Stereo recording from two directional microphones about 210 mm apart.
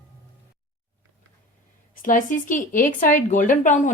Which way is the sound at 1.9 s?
40° left (ahead or behind).